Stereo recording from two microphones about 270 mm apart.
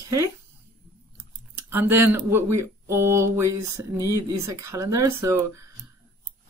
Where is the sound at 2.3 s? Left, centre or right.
Centre.